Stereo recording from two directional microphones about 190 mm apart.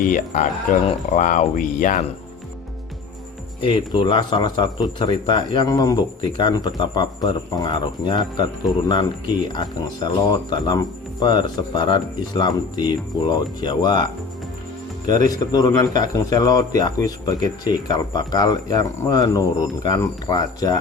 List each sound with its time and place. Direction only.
0.3 s speech: 40° left (ahead or behind)
3.6 s speech: 25° left (ahead or behind)
15.2 s speech: 20° left (ahead or behind)